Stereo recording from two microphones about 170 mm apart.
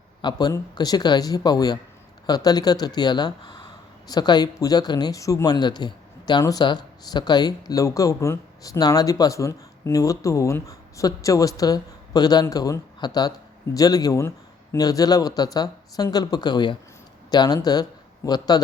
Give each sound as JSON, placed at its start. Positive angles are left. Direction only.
{"t": 0.2, "sound": "speech", "side_deg": 25}